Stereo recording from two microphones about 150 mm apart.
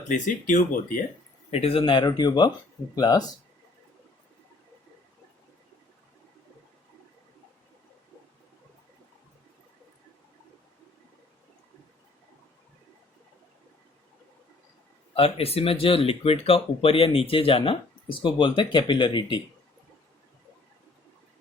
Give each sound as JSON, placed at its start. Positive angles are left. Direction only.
{"t": 0.1, "sound": "speech", "side_deg": 60}
{"t": 1.5, "sound": "speech", "side_deg": 40}
{"t": 15.1, "sound": "speech", "side_deg": 40}